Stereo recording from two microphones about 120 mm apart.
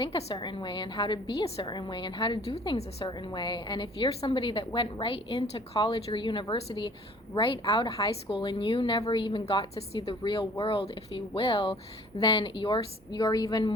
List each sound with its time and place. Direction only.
0.0 s a woman's voice: 50° left (ahead or behind)
0.3 s a woman's voice: 40° left (ahead or behind)